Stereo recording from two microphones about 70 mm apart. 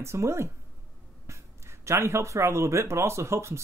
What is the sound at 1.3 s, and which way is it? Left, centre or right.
Speech, right.